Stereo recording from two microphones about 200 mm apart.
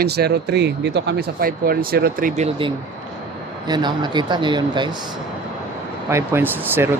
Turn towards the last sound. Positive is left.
turn(degrees=-10)  # may be behind; listen again after turning